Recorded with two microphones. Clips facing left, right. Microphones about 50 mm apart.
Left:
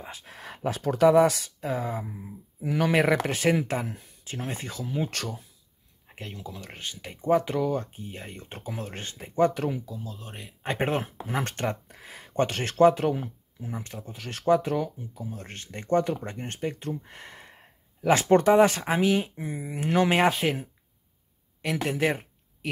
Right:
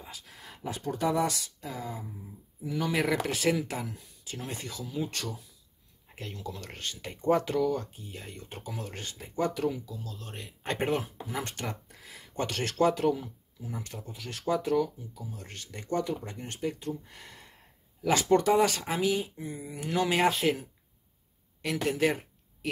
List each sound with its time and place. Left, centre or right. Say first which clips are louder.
0.0 s a sound: left 5 dB; left
0.4 s a sound: left 8 dB; left
1.0 s speech: left 10 dB; left
1.6 s speech: left 11 dB; left
2.1 s speech: left 5 dB; left
3.2 s speech: left 3 dB; left
6.0 s speech: even; left
7.5 s speech: left 1 dB; left
9.9 s speech: left 2 dB; centre
10.8 s speech: left 2 dB; left
21.7 s a sound: left 1 dB; left